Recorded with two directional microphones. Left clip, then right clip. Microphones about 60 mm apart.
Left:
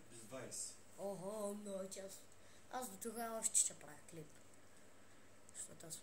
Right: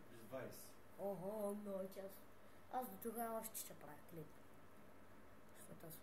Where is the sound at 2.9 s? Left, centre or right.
Centre.